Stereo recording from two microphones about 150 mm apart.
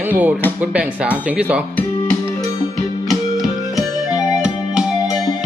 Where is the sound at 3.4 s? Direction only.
20° left (ahead or behind).